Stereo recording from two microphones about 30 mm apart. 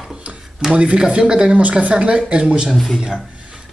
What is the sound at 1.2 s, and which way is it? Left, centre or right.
Speech, right.